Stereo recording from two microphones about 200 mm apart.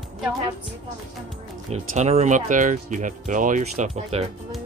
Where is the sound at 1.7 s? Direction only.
35° right (ahead or behind).